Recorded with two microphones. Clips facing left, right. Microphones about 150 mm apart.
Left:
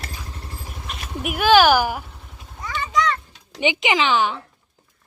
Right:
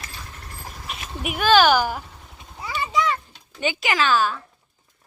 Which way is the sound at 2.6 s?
10° right (ahead or behind).